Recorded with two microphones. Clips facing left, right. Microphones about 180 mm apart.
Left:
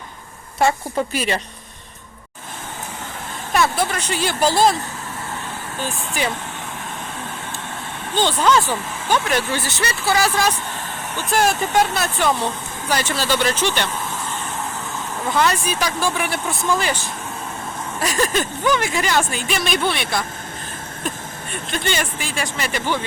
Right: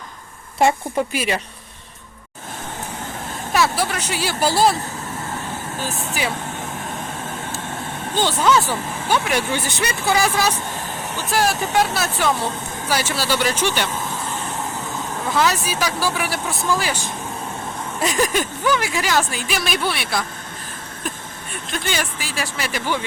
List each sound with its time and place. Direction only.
0.9 s speech: 10° right (ahead or behind)
3.5 s speech: 5° right (ahead or behind)
8.1 s speech: 10° right (ahead or behind)
15.3 s speech: centre (ahead or behind)
18.0 s a sound: 20° right (ahead or behind)
18.3 s speech: 5° right (ahead or behind)
21.7 s speech: 5° right (ahead or behind)